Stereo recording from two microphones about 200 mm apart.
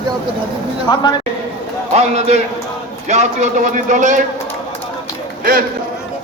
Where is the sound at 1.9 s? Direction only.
35° right (ahead or behind).